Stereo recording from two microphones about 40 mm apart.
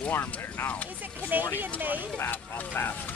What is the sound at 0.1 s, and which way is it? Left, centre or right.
Speech, left.